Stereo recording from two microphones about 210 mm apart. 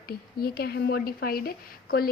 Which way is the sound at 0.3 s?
45° left (ahead or behind).